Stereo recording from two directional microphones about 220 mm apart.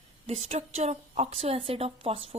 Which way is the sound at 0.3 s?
30° right (ahead or behind).